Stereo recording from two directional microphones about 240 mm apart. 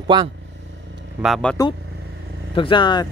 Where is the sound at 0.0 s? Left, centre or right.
Centre.